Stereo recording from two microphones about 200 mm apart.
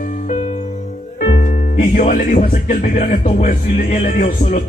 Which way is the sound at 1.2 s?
35° left (ahead or behind).